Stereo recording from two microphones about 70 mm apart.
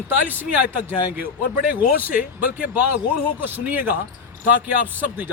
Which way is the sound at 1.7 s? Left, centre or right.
Right.